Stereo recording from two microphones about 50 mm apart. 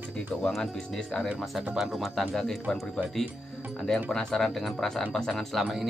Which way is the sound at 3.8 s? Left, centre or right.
Centre.